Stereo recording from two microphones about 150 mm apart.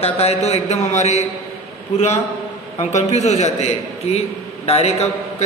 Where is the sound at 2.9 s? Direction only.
50° left (ahead or behind).